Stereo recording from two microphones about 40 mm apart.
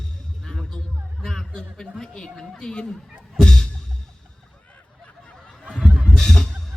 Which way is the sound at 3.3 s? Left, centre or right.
Centre.